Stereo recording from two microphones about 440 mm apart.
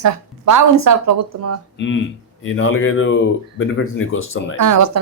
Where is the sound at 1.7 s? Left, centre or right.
Left.